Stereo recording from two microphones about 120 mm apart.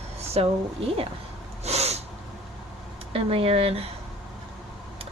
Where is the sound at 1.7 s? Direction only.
60° right (ahead or behind).